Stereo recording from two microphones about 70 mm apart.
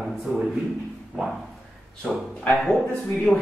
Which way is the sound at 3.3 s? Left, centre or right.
Centre.